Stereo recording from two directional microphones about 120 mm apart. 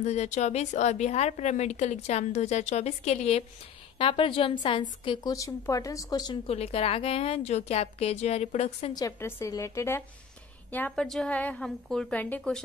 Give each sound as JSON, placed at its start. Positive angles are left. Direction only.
{"t": 0.0, "sound": "a woman's voice", "side_deg": 70}
{"t": 4.0, "sound": "a woman's voice", "side_deg": 45}
{"t": 5.3, "sound": "a woman's voice", "side_deg": 25}
{"t": 6.4, "sound": "a woman's voice", "side_deg": 55}
{"t": 8.9, "sound": "a woman's voice", "side_deg": 25}